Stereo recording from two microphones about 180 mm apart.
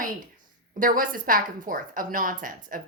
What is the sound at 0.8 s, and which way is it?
A woman's voice, 50° right (ahead or behind).